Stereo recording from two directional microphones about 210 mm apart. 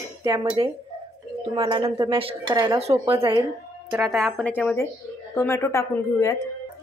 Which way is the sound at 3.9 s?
Centre (ahead or behind).